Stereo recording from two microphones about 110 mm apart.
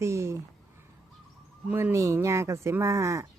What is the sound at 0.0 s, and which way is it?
Speech, 25° right (ahead or behind).